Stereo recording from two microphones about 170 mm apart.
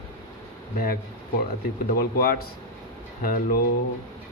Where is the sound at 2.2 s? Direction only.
60° left (ahead or behind).